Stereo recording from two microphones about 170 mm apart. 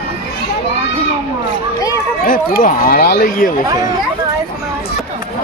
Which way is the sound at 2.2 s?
55° left (ahead or behind).